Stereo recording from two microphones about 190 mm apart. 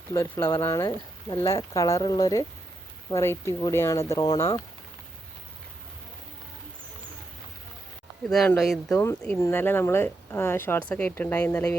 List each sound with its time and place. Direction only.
0.1 s speech: 10° left (ahead or behind)
8.3 s speech: centre (ahead or behind)
8.9 s speech: 15° left (ahead or behind)